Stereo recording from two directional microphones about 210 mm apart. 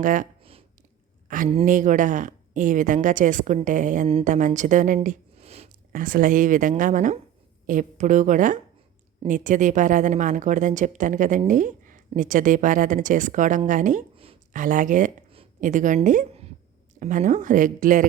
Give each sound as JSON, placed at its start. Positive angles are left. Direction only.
{"t": 0.0, "sound": "a woman's voice", "side_deg": -40}
{"t": 1.5, "sound": "a woman's voice", "side_deg": -35}